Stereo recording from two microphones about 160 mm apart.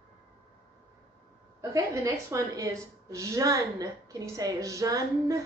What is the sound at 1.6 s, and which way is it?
A woman's voice, 20° right (ahead or behind).